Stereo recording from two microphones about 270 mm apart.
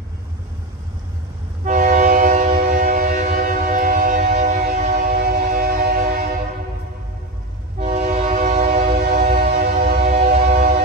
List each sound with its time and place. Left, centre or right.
1.6 s train: right
7.8 s train: right
10.1 s train: right